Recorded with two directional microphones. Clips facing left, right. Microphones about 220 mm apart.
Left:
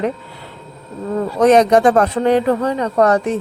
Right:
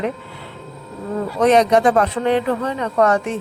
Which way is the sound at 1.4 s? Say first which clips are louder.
Left 3 dB; 45° left (ahead or behind).